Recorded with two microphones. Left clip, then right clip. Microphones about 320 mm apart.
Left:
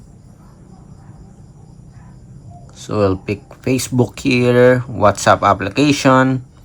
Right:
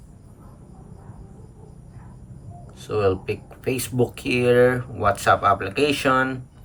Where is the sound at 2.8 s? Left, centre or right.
Centre.